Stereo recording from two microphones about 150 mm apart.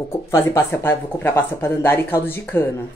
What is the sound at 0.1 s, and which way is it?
Speech, 15° left (ahead or behind).